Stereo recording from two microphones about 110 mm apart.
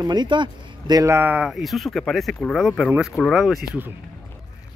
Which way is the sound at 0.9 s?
25° right (ahead or behind).